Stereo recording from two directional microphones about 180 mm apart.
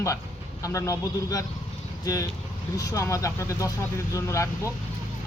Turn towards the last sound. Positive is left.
turn(degrees=15)  # may be behind; listen again after turning